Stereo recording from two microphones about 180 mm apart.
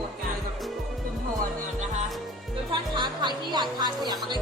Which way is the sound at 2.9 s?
25° right (ahead or behind).